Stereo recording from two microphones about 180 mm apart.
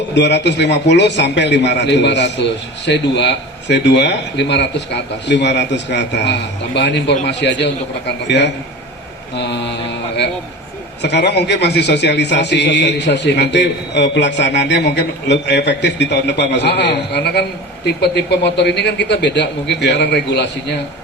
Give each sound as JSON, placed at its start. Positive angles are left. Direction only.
{"t": 0.1, "sound": "a man's voice", "side_deg": 75}
{"t": 11.0, "sound": "a man's voice", "side_deg": 70}